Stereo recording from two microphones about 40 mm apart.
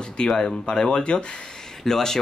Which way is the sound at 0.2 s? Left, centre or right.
Left.